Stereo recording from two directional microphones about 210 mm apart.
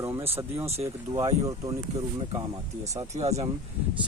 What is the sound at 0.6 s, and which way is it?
Speech, 30° right (ahead or behind).